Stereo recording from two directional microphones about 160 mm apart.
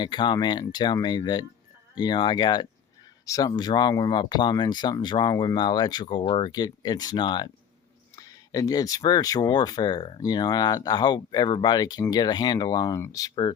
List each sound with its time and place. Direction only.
0.0 s speech: 30° left (ahead or behind)